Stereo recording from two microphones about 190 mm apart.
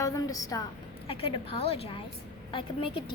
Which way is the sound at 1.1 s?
30° left (ahead or behind).